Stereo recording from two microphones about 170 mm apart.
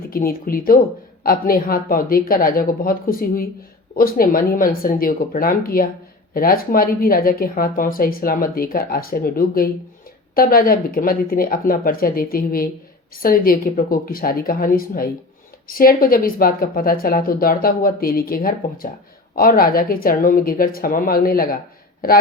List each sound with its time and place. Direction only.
0.1 s a woman's voice: 60° left (ahead or behind)